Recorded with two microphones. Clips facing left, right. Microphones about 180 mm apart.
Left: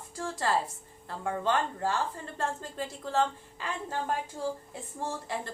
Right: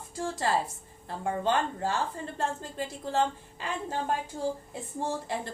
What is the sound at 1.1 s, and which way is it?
A woman's voice, 20° right (ahead or behind).